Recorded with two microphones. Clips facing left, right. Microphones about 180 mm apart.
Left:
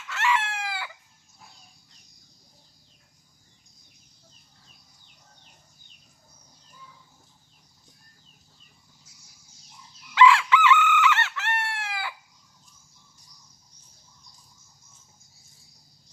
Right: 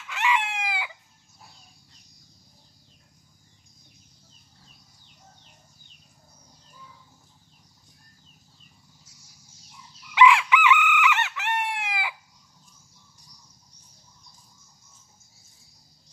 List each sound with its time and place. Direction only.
0.1 s chicken: 15° right (ahead or behind)
10.1 s chicken: 15° right (ahead or behind)